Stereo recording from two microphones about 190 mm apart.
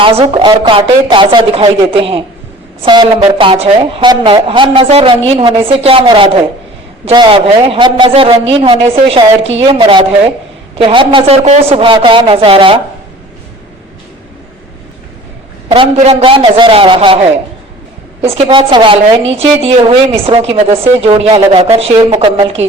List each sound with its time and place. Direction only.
0.0 s a woman's voice: 30° right (ahead or behind)
15.7 s a woman's voice: 30° right (ahead or behind)